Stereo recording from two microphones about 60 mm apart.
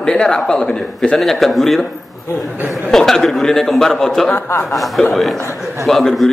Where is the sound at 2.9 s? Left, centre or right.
Centre.